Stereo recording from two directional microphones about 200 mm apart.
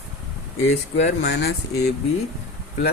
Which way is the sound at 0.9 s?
60° left (ahead or behind).